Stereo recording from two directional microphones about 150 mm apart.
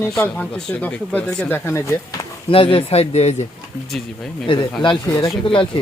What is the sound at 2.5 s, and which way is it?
Speech, 40° left (ahead or behind).